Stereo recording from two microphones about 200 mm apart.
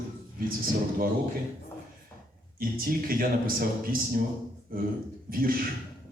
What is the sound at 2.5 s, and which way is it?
A man's voice, 45° right (ahead or behind).